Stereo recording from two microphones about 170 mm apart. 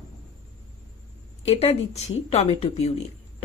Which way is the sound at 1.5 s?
40° left (ahead or behind).